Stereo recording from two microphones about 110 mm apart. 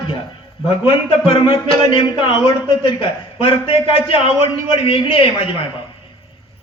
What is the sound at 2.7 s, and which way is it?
A man's voice, 50° left (ahead or behind).